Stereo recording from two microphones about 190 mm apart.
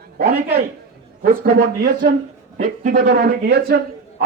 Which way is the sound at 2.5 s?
45° right (ahead or behind).